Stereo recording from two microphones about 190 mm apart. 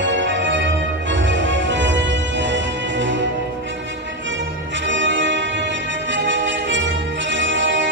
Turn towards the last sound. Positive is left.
turn(degrees=-75)  # may be behind; listen again after turning